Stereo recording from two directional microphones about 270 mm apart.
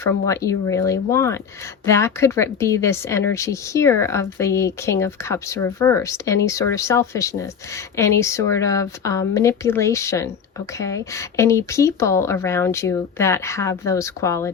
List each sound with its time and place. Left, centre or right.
0.0 s speech: centre